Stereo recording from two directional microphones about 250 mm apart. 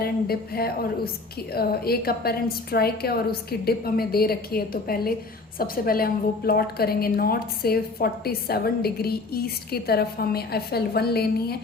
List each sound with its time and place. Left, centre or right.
0.0 s a woman's voice: left